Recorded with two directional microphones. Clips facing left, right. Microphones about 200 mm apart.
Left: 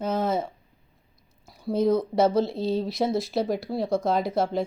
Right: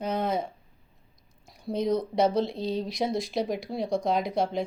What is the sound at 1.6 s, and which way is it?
A woman's voice, 5° left (ahead or behind).